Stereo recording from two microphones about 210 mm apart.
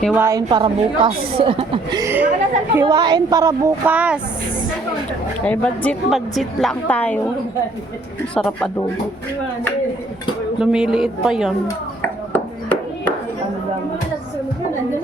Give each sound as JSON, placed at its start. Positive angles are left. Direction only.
{"t": 0.0, "sound": "a woman's voice", "side_deg": -10}
{"t": 5.5, "sound": "a woman's voice", "side_deg": 5}
{"t": 8.4, "sound": "a woman's voice", "side_deg": 0}
{"t": 10.6, "sound": "a woman's voice", "side_deg": -5}
{"t": 12.0, "sound": "ping", "side_deg": 10}